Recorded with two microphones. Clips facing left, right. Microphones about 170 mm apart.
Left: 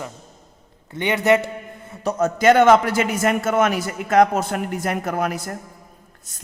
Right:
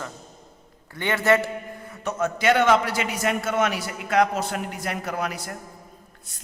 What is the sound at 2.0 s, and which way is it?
A man's voice, 40° left (ahead or behind).